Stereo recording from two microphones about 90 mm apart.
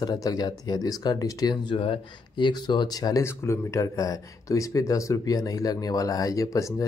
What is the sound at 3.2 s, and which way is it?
Speech, 30° left (ahead or behind).